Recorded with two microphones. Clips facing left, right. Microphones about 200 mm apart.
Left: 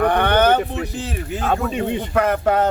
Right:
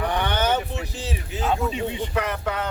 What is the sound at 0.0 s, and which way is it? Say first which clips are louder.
Speech: left 8 dB; 60° left (ahead or behind).